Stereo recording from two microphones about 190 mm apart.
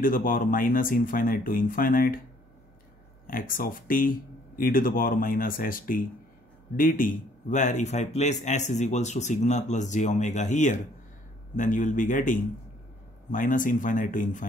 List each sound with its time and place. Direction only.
0.0 s speech: 45° left (ahead or behind)
3.3 s speech: 45° left (ahead or behind)